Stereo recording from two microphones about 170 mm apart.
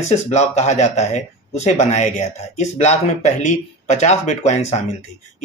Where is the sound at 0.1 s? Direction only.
40° left (ahead or behind).